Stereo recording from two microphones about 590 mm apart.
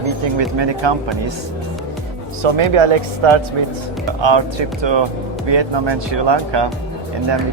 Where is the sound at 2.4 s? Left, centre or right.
Right.